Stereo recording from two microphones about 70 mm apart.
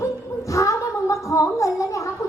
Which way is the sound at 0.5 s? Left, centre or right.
Left.